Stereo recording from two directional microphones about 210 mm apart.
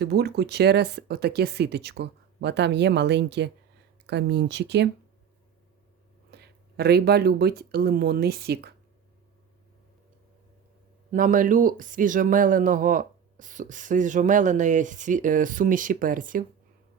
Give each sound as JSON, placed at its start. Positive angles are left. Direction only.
{"t": 0.0, "sound": "speech", "side_deg": -50}
{"t": 6.3, "sound": "speech", "side_deg": -50}
{"t": 11.1, "sound": "speech", "side_deg": -40}